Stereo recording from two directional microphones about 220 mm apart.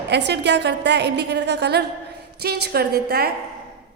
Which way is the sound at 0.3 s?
50° right (ahead or behind).